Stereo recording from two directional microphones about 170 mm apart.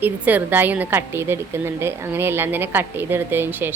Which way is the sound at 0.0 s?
10° right (ahead or behind).